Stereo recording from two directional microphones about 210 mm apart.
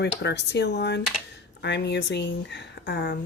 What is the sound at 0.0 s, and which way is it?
Speech, 55° left (ahead or behind).